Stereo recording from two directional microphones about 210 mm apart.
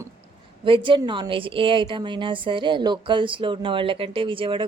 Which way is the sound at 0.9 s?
20° right (ahead or behind).